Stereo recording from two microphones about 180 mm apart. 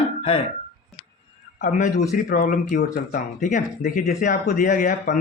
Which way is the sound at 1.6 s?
40° left (ahead or behind).